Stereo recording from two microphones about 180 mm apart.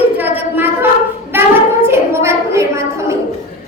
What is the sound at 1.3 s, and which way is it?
Child singing, 10° right (ahead or behind).